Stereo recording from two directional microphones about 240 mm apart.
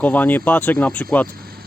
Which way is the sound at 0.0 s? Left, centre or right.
Centre.